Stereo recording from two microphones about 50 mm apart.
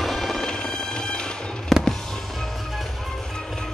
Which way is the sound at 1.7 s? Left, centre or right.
Centre.